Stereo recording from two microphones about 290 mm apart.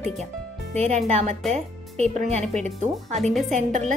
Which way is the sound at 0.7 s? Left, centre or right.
Right.